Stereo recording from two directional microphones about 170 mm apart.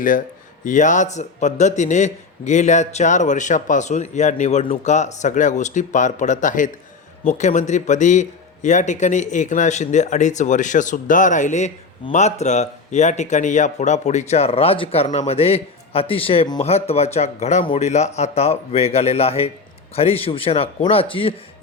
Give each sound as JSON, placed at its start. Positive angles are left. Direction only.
{"t": 0.6, "sound": "a man's voice", "side_deg": 45}